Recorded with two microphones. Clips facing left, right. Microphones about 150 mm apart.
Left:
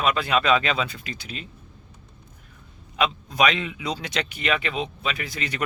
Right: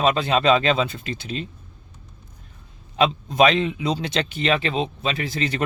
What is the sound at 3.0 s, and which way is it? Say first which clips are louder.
Speech: right 5 dB; 30° right (ahead or behind).